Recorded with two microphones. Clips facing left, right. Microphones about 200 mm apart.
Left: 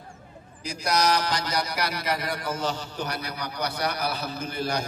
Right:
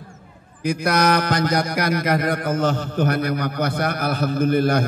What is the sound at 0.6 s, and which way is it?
A man's voice, 55° right (ahead or behind).